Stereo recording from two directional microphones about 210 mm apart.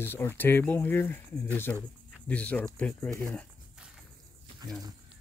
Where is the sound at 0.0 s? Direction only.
10° left (ahead or behind).